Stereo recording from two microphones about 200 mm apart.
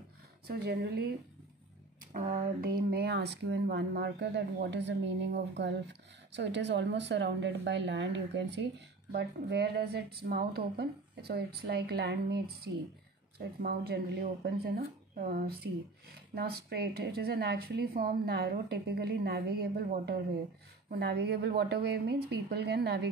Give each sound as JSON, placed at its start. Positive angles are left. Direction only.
{"t": 0.5, "sound": "speech", "side_deg": -50}
{"t": 2.1, "sound": "speech", "side_deg": -40}